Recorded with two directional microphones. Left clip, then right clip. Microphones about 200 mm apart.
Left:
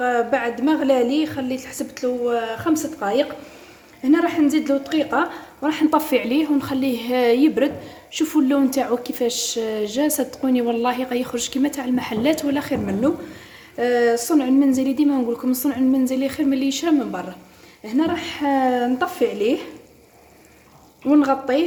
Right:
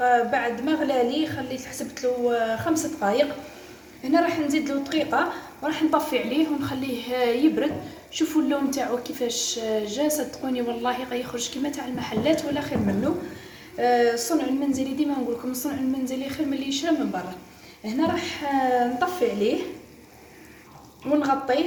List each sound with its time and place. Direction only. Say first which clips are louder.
0.0 s a woman's voice: left 1 dB; 50° left (ahead or behind)
13.7 s a woman's voice: left 2 dB; 50° left (ahead or behind)
21.1 s a woman's voice: left 4 dB; 50° left (ahead or behind)